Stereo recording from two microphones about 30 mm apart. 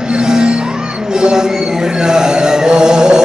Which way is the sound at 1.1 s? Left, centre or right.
Right.